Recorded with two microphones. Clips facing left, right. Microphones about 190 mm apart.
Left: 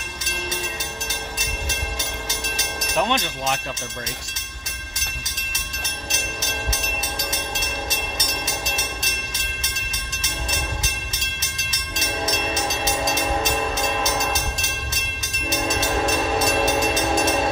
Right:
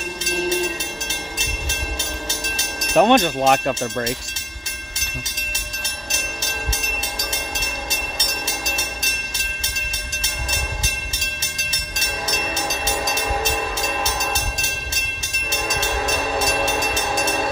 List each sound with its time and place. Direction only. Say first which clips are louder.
2.9 s speech: right 9 dB; 50° right (ahead or behind)
16.3 s train: left 2 dB; 30° right (ahead or behind)